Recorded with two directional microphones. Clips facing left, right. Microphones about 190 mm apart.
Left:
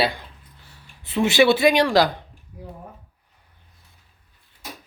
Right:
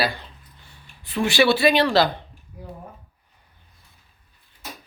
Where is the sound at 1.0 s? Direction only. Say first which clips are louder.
Left 2 dB; 20° left (ahead or behind).